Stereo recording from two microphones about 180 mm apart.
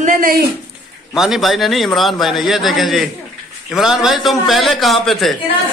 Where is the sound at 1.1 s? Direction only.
Centre (ahead or behind).